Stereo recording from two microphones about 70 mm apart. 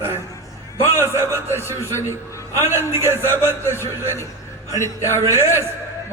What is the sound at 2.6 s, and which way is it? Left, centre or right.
Speech, right.